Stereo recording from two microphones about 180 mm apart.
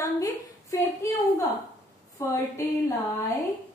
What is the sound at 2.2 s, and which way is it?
Speech, 15° left (ahead or behind).